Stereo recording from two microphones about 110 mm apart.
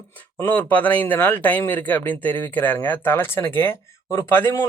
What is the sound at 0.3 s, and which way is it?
Speech, 15° left (ahead or behind).